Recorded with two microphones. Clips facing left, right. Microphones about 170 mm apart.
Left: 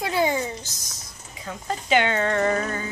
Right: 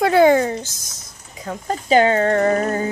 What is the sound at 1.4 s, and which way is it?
Speech, 40° right (ahead or behind).